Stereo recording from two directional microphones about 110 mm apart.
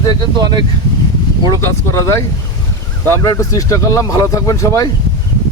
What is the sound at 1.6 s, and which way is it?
Speech, 20° left (ahead or behind).